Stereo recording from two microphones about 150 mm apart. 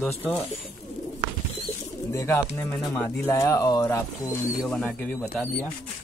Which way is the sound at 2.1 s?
20° left (ahead or behind).